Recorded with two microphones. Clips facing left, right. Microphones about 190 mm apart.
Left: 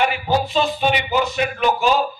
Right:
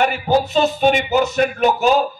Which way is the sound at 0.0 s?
45° right (ahead or behind).